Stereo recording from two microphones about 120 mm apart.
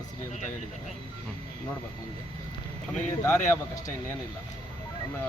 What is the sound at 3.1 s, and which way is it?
Speech, 25° left (ahead or behind).